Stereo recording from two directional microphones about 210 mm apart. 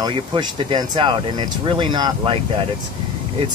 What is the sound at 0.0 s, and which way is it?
Speech, 20° right (ahead or behind).